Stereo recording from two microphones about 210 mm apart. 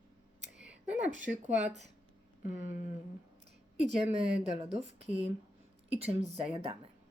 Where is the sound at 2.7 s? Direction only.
35° left (ahead or behind).